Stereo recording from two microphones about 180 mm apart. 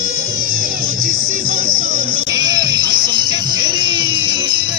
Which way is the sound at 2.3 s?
20° right (ahead or behind).